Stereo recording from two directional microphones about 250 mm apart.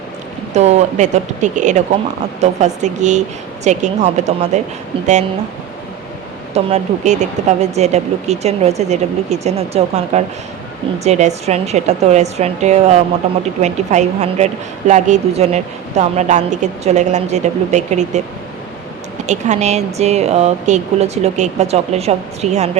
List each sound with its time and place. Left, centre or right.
0.5 s a woman's voice: right
6.5 s a woman's voice: right
19.3 s a woman's voice: right